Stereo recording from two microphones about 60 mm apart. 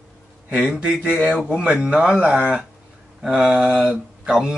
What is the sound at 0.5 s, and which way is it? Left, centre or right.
Speech, centre.